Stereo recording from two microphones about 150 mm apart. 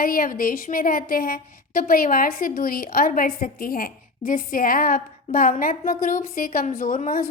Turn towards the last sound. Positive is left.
turn(degrees=65)  # may be behind; listen again after turning